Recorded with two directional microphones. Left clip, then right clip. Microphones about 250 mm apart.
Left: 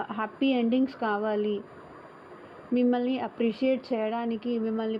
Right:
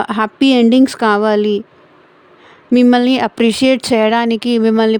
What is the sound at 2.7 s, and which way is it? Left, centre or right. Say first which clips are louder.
Speech: right 15 dB; right.